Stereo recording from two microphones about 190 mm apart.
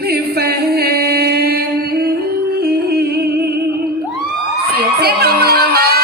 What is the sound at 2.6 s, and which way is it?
Music, 55° right (ahead or behind).